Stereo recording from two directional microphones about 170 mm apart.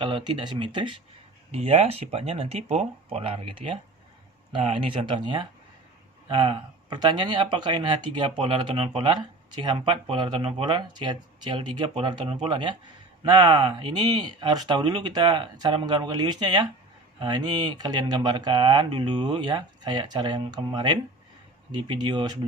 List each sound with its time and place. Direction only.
0.0 s speech: 25° right (ahead or behind)